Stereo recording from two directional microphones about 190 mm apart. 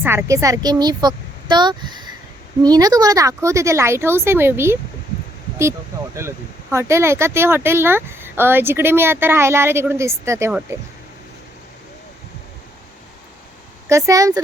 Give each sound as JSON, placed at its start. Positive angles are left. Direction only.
{"t": 0.0, "sound": "a woman's voice", "side_deg": -10}
{"t": 6.1, "sound": "speech", "side_deg": -15}
{"t": 13.8, "sound": "speech", "side_deg": -15}